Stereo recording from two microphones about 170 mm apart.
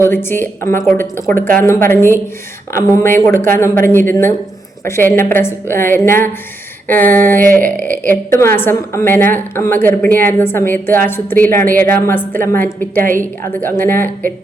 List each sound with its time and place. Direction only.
0.0 s a woman's voice: 15° left (ahead or behind)